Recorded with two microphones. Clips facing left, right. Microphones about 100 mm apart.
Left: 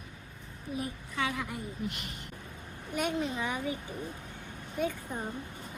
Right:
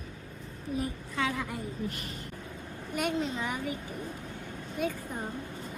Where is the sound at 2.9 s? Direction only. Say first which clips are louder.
Right 1 dB; 20° left (ahead or behind).